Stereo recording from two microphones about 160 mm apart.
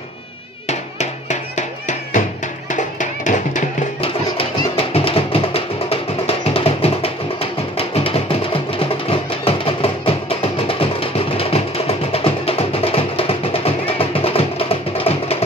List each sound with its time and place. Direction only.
0.7 s music: 45° left (ahead or behind)
4.0 s music: 35° left (ahead or behind)